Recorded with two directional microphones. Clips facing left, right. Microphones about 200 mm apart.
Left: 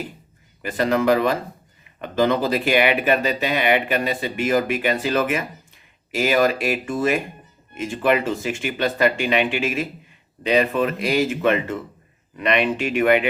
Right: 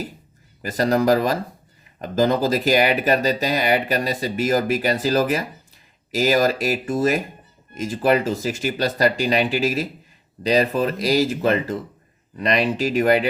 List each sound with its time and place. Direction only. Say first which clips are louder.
0.6 s speech: right 1 dB; 40° right (ahead or behind)